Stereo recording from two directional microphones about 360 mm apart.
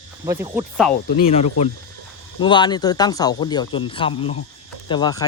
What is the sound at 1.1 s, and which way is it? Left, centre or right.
Speech, centre.